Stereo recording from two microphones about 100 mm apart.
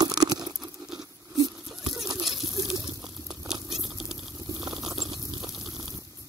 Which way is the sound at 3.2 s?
5° right (ahead or behind).